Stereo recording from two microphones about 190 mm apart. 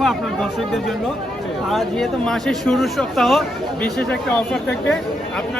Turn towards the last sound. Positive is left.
turn(degrees=5)  # may be behind; listen again after turning